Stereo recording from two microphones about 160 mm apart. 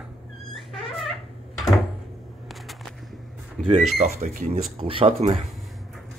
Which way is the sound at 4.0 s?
55° right (ahead or behind).